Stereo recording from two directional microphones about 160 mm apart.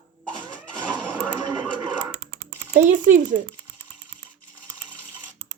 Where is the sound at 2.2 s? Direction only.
80° right.